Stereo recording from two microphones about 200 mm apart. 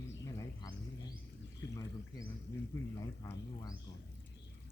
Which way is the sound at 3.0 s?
15° left (ahead or behind).